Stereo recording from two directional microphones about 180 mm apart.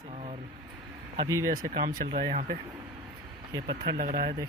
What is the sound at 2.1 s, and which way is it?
Speech, 35° right (ahead or behind).